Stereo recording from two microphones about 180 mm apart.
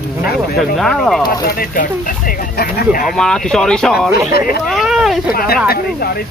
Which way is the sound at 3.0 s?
5° left (ahead or behind).